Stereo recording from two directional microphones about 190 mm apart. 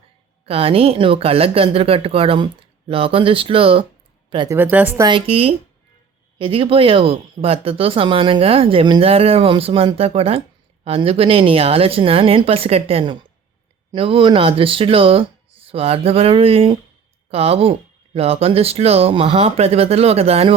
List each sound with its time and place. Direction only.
0.4 s speech: 30° right (ahead or behind)
4.5 s a woman's voice: 10° right (ahead or behind)
5.0 s speech: 30° right (ahead or behind)